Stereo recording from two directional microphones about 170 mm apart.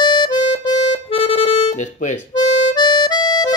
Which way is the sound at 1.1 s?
35° left (ahead or behind).